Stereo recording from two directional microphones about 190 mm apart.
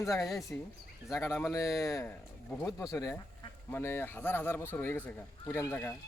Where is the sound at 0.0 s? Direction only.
15° left (ahead or behind).